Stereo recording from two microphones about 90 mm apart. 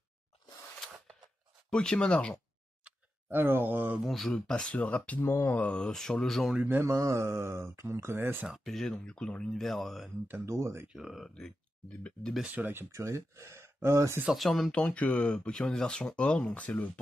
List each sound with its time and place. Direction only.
1.7 s speech: 10° left (ahead or behind)
2.8 s a sound: 20° right (ahead or behind)
4.0 s speech: centre (ahead or behind)
6.5 s speech: 15° right (ahead or behind)
6.8 s speech: 30° right (ahead or behind)
8.5 s speech: centre (ahead or behind)
10.2 s speech: 20° right (ahead or behind)
10.9 s speech: 5° right (ahead or behind)
12.4 s speech: 20° right (ahead or behind)
12.9 s speech: 35° right (ahead or behind)
14.3 s speech: centre (ahead or behind)
14.7 s speech: 15° left (ahead or behind)